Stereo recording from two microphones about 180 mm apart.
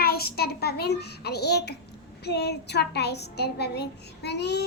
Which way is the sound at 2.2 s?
65° left (ahead or behind).